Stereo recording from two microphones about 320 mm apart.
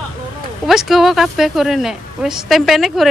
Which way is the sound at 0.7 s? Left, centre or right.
Centre.